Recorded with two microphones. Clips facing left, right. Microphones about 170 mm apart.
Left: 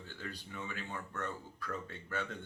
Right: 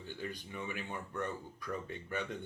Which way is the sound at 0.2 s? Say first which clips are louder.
Right 2 dB; 15° right (ahead or behind).